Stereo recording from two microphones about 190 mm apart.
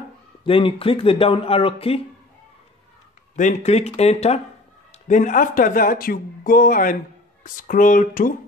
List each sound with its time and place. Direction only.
0.4 s speech: 30° left (ahead or behind)
3.3 s speech: 40° left (ahead or behind)